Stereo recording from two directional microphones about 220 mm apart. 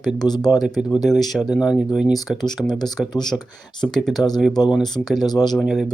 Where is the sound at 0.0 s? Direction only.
Centre (ahead or behind).